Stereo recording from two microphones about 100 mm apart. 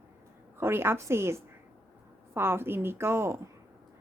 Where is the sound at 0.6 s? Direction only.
25° right (ahead or behind).